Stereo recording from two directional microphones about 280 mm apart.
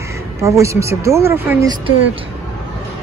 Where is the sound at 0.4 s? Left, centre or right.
Centre.